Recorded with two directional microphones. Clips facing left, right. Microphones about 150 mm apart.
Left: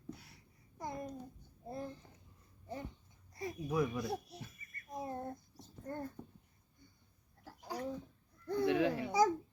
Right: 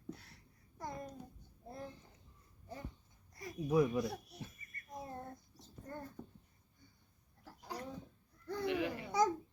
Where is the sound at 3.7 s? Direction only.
20° right (ahead or behind).